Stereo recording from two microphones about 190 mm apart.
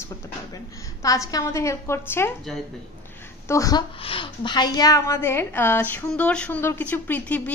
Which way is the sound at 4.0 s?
25° left (ahead or behind).